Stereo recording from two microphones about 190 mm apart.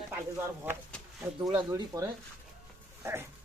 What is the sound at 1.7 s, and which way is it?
Speech, 15° right (ahead or behind).